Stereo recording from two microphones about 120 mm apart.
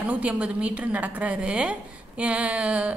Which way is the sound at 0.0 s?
10° right (ahead or behind).